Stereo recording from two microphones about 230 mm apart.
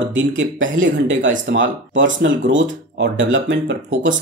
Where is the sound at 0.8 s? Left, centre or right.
Right.